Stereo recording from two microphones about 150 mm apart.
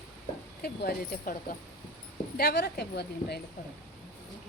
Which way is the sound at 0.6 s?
90° left.